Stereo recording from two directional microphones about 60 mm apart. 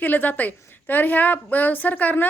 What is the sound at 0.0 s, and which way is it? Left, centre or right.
A woman's voice, left.